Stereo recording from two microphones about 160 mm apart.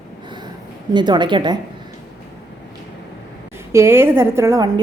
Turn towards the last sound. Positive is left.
turn(degrees=-20)  # may be behind; listen again after turning